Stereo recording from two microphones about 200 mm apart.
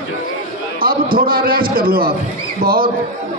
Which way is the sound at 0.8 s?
45° right (ahead or behind).